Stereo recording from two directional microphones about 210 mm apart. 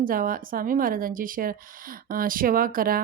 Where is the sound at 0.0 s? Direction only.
40° right (ahead or behind).